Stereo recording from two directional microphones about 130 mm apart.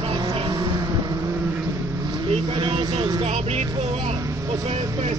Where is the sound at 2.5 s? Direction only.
35° right (ahead or behind).